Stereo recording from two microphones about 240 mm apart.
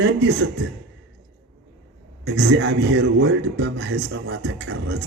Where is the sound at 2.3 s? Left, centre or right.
Right.